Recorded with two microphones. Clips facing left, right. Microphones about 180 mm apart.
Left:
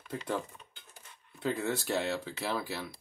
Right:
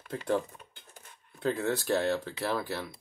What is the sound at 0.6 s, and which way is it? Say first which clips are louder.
Dishes: right 3 dB; 55° right (ahead or behind).